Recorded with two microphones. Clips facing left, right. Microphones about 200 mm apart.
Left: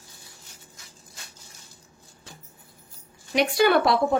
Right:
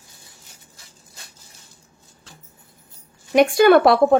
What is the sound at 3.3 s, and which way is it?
Speech, 50° right (ahead or behind).